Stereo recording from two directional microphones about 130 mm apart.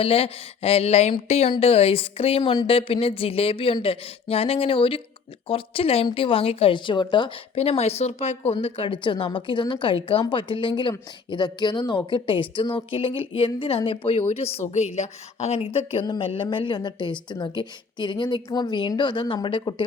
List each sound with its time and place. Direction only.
0.0 s a woman's voice: 50° left (ahead or behind)
2.4 s a woman's voice: 35° left (ahead or behind)
7.5 s a woman's voice: 50° left (ahead or behind)
8.5 s a woman's voice: 45° left (ahead or behind)